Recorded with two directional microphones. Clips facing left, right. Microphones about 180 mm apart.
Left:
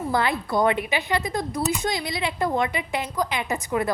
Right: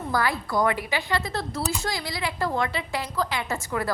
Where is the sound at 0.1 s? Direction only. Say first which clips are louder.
Left 1 dB; 25° left (ahead or behind).